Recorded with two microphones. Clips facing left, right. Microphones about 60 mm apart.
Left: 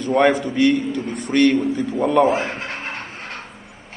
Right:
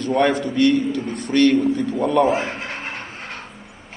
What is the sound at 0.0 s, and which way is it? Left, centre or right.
A man's voice, centre.